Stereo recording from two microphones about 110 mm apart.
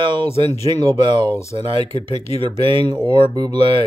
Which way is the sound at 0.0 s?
50° right (ahead or behind).